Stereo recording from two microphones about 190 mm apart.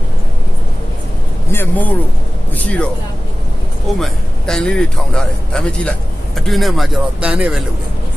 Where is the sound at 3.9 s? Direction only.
Centre (ahead or behind).